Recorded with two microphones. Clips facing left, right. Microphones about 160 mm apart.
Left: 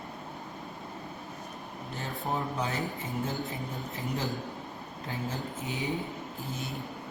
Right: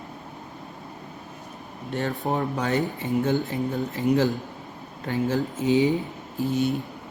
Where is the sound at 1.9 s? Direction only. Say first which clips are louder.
Right 8 dB; 70° right (ahead or behind).